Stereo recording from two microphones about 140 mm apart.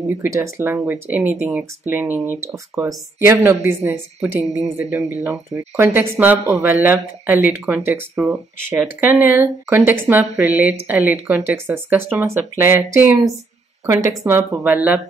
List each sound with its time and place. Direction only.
0.3 s speech: 20° right (ahead or behind)